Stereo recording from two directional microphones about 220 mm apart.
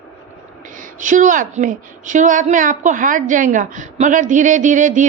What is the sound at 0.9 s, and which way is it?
A woman's voice, 35° right (ahead or behind).